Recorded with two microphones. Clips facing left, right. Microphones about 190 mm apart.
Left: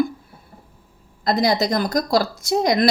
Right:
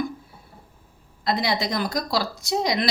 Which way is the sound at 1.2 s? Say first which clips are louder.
Left 5 dB; 45° left (ahead or behind).